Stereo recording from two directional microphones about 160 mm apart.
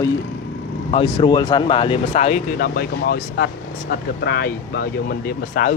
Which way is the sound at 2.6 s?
70° left (ahead or behind).